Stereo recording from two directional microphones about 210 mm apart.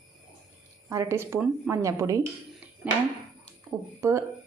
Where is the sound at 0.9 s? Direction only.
15° right (ahead or behind).